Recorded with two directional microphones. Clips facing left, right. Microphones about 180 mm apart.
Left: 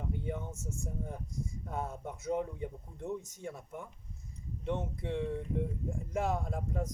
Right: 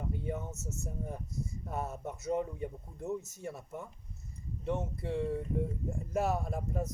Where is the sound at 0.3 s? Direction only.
5° right (ahead or behind).